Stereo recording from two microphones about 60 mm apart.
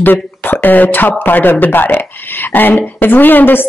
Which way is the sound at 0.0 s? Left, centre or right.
Left.